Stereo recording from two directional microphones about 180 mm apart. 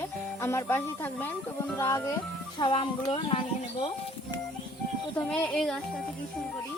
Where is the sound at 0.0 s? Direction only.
15° left (ahead or behind).